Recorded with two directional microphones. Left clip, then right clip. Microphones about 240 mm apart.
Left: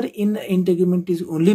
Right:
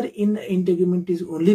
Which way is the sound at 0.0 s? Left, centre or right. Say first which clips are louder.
Left 1 dB; left.